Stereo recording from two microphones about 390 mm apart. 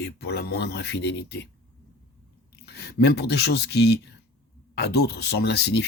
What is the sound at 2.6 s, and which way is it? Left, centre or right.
Speech, left.